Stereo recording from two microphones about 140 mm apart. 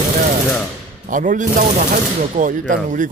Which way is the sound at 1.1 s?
70° right (ahead or behind).